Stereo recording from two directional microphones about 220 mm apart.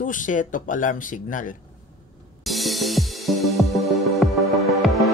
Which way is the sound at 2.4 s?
Centre (ahead or behind).